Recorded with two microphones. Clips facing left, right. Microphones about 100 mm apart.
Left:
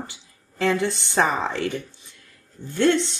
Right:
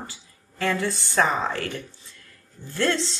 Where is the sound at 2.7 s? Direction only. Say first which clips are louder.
Left 5 dB; 20° left (ahead or behind).